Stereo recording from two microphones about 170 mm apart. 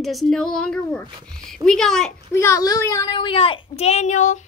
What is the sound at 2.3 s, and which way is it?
A child's voice, 15° left (ahead or behind).